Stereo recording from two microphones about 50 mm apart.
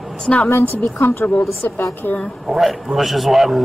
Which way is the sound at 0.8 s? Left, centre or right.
Left.